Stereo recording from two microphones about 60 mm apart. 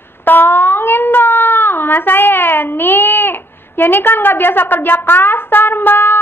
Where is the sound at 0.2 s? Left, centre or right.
Left.